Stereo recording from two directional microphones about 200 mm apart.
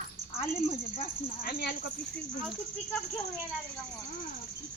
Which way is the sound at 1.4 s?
55° left (ahead or behind).